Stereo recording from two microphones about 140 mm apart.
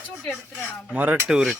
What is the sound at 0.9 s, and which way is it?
Speech, 10° right (ahead or behind).